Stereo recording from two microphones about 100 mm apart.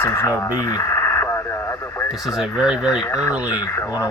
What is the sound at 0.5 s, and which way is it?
Radio, 40° left (ahead or behind).